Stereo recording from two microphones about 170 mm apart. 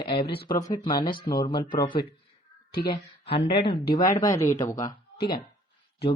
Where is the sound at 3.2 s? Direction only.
35° left (ahead or behind).